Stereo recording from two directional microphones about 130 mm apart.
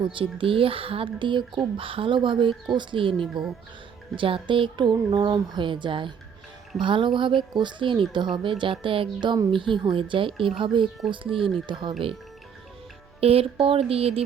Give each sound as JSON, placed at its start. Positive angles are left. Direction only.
{"t": 0.0, "sound": "speech", "side_deg": -40}
{"t": 13.1, "sound": "speech", "side_deg": -50}